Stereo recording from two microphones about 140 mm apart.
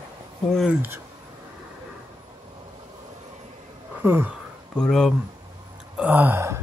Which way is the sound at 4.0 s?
15° right (ahead or behind).